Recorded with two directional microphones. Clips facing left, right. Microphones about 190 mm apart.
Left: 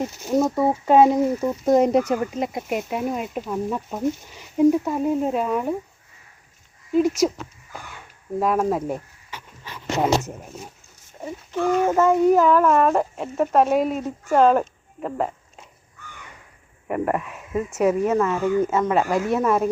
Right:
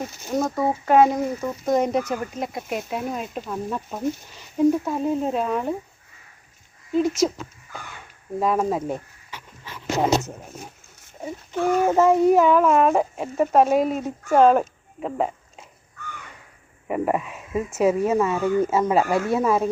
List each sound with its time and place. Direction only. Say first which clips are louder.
0.3 s speech: left 3 dB; 5° left (ahead or behind)
0.9 s speech: left 2 dB; 25° left (ahead or behind)
1.4 s speech: left 4 dB; 10° left (ahead or behind)
1.7 s speech: left 4 dB; 30° left (ahead or behind)
2.1 s speech: left 4 dB; 20° left (ahead or behind)
4.0 s speech: left 2 dB; 15° left (ahead or behind)
6.9 s speech: left 2 dB; 10° left (ahead or behind)
8.4 s speech: left 1 dB; 5° left (ahead or behind)
11.2 s speech: even; centre (ahead or behind)
16.9 s speech: even; 5° right (ahead or behind)